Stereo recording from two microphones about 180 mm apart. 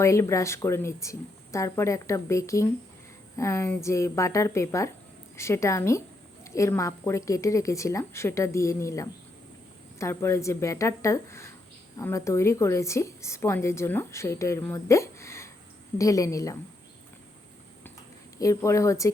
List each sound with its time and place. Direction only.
0.0 s a woman's voice: 15° left (ahead or behind)
18.3 s a woman's voice: 15° left (ahead or behind)